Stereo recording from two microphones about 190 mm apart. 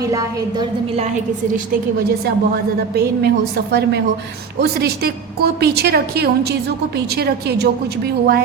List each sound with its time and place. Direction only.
0.0 s a woman's voice: 20° right (ahead or behind)
2.9 s a woman's voice: 55° right (ahead or behind)